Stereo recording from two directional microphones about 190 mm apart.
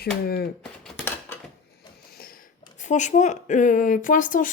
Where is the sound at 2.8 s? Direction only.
40° left (ahead or behind).